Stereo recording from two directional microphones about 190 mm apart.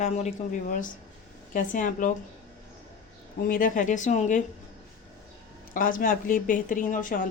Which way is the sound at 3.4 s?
45° left (ahead or behind).